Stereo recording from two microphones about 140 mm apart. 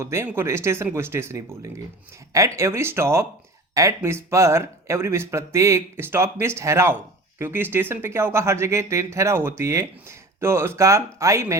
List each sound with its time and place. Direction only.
0.0 s speech: 20° right (ahead or behind)